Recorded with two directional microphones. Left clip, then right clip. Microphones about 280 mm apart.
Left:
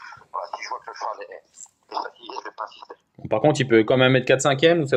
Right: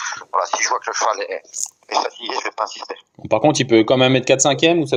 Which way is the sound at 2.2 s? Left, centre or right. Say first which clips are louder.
Right 10 dB; right.